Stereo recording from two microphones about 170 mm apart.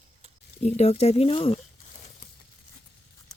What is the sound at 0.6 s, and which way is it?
Speech, 40° left (ahead or behind).